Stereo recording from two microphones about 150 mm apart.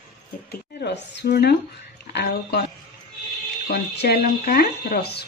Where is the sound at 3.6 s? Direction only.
90° left.